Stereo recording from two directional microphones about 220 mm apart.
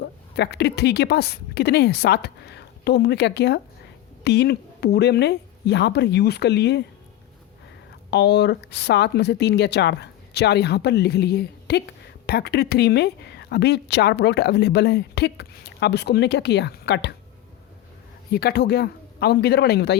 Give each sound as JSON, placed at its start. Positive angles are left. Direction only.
{"t": 0.3, "sound": "speech", "side_deg": 50}
{"t": 8.1, "sound": "speech", "side_deg": 50}
{"t": 18.3, "sound": "speech", "side_deg": 45}